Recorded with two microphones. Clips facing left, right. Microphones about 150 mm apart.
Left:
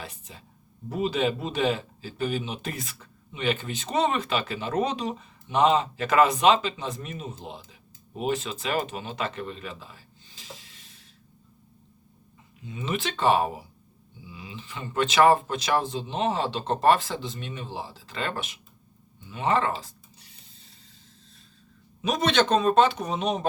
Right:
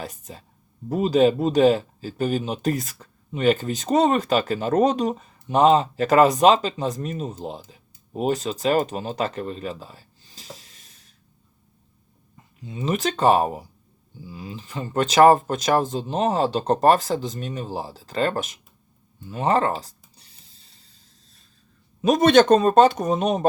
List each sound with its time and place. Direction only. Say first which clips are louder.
0.0 s speech: right 6 dB; 40° right (ahead or behind)
12.6 s speech: right 6 dB; 35° right (ahead or behind)
22.0 s speech: right 8 dB; 45° right (ahead or behind)